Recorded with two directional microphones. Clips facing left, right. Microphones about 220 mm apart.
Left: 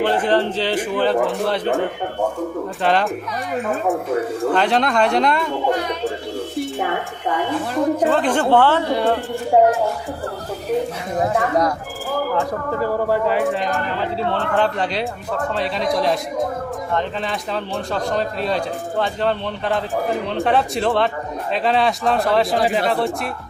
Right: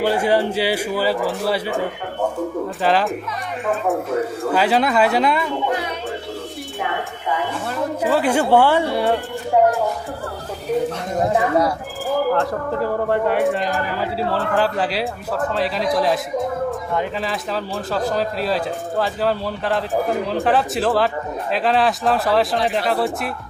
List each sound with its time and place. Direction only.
0.0 s speech: 10° right (ahead or behind)
2.8 s speech: centre (ahead or behind)
4.4 s speech: 5° right (ahead or behind)
7.9 s speech: 10° right (ahead or behind)
9.5 s speech: 25° left (ahead or behind)
11.1 s speech: centre (ahead or behind)